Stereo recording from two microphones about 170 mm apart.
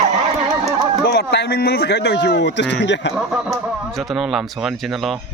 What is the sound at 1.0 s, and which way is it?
Speech, 75° left (ahead or behind).